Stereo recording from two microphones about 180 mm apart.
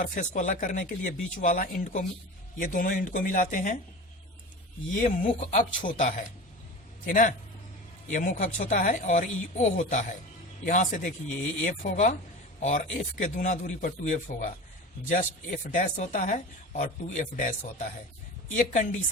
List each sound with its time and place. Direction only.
0.0 s speech: 45° left (ahead or behind)
5.2 s speech: 45° left (ahead or behind)